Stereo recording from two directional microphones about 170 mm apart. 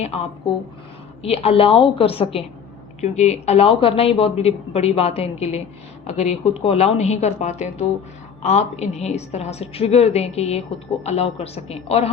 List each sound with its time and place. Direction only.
0.0 s a woman's voice: 35° left (ahead or behind)